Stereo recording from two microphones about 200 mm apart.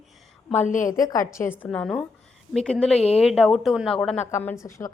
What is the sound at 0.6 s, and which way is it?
Speech, 40° left (ahead or behind).